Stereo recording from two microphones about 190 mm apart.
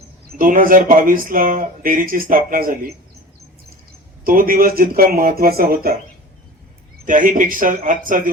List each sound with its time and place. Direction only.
0.3 s speech: 45° right (ahead or behind)
4.2 s speech: 50° right (ahead or behind)
7.0 s speech: 45° right (ahead or behind)